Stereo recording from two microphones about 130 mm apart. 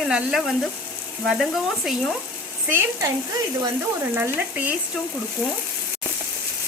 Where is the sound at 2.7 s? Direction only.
20° right (ahead or behind).